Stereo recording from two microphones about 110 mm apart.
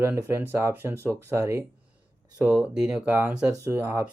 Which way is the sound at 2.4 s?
10° right (ahead or behind).